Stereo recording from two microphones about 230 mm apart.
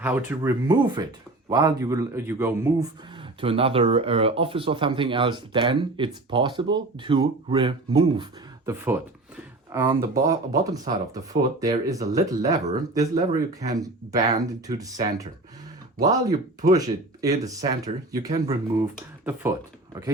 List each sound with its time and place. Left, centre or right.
0.0 s speech: centre
3.4 s speech: right
9.7 s speech: centre